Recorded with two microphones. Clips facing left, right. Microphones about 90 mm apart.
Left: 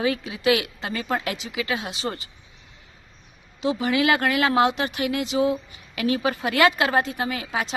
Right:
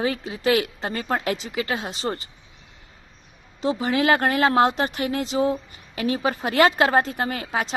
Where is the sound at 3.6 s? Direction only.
35° right (ahead or behind).